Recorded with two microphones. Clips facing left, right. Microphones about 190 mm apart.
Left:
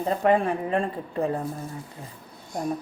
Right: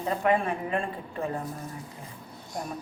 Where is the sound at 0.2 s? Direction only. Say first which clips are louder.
Left 4 dB; 35° left (ahead or behind).